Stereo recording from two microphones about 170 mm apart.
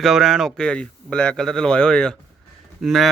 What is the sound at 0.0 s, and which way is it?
A man's voice, centre (ahead or behind).